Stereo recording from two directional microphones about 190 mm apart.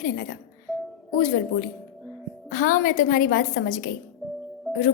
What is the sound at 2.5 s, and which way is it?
Speech, 45° left (ahead or behind).